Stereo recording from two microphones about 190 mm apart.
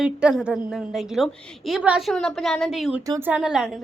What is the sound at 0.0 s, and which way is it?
A woman's voice, 5° right (ahead or behind).